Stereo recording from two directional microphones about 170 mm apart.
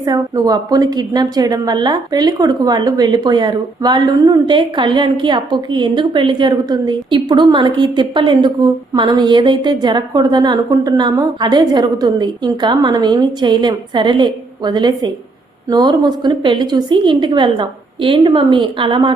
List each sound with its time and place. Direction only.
0.0 s a woman's voice: 20° right (ahead or behind)